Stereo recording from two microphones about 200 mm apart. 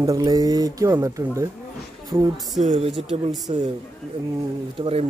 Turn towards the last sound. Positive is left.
turn(degrees=-30)  # may be behind; listen again after turning